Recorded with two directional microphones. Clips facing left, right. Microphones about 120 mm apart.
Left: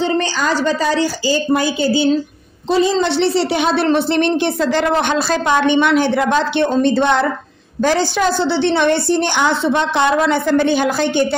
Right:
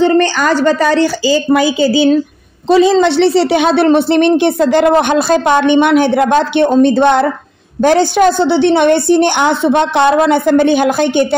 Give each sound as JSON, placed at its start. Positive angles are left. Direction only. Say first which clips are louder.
{"t": 0.0, "sound": "a woman's voice", "louder": "right 7 dB", "side_deg": -60}
{"t": 3.2, "sound": "a woman's voice", "louder": "right 6 dB", "side_deg": -65}